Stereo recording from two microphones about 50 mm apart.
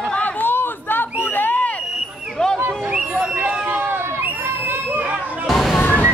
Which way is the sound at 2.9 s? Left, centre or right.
Centre.